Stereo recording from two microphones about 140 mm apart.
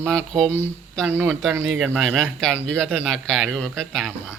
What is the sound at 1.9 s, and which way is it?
A man's voice, centre (ahead or behind).